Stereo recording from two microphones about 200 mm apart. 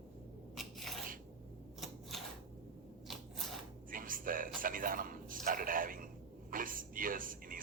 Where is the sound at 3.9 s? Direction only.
45° right (ahead or behind).